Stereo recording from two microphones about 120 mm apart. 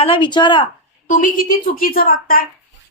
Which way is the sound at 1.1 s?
90° left.